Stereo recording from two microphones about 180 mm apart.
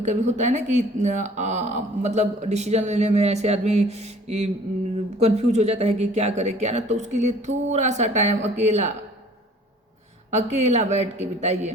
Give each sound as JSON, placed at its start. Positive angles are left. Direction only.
{"t": 0.0, "sound": "speech", "side_deg": -40}
{"t": 10.3, "sound": "speech", "side_deg": -40}